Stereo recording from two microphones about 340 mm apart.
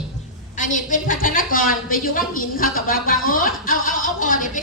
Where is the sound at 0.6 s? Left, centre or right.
Left.